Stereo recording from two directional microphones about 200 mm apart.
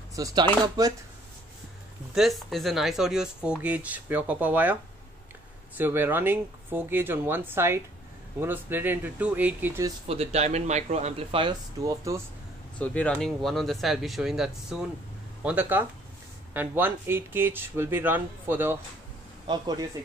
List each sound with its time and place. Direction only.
0.1 s speech: 20° right (ahead or behind)
2.1 s speech: centre (ahead or behind)
5.8 s speech: 10° right (ahead or behind)
10.0 s speech: 30° right (ahead or behind)
12.7 s speech: 5° left (ahead or behind); by 18.8 s 10° right (ahead or behind)
19.4 s speech: 20° right (ahead or behind)